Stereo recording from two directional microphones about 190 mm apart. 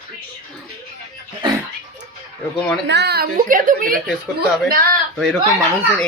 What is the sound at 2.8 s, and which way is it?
A woman's voice, 60° right (ahead or behind).